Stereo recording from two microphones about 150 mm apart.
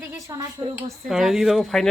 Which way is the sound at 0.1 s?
20° right (ahead or behind).